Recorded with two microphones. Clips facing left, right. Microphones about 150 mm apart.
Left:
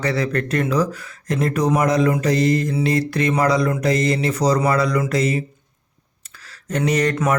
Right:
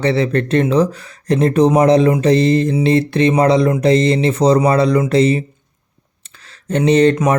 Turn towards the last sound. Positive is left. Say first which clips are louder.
# right 7 dB
turn(degrees=-25)  # may be behind; listen again after turning